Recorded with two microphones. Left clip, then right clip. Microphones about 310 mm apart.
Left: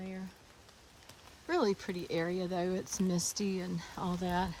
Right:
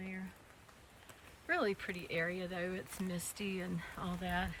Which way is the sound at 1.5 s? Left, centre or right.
Centre.